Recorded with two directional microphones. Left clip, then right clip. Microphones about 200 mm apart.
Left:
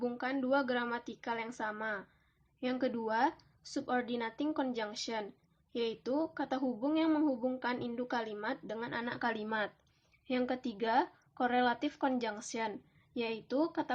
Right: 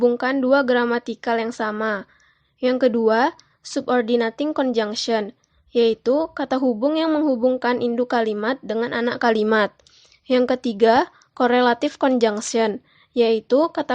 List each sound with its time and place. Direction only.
0.0 s speech: 40° right (ahead or behind)